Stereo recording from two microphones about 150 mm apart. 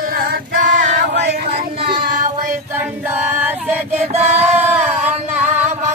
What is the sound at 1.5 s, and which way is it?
Child singing, 35° right (ahead or behind).